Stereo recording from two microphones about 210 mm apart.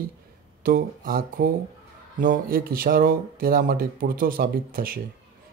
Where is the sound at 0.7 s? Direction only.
45° right (ahead or behind).